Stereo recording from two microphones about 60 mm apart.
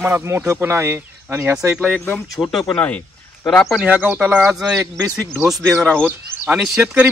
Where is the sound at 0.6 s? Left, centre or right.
Right.